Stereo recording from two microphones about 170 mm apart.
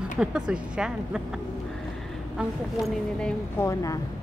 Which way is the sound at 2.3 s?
Centre (ahead or behind).